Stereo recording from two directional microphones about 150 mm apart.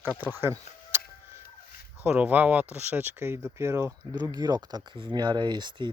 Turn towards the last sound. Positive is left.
turn(degrees=-30)  # may be behind; listen again after turning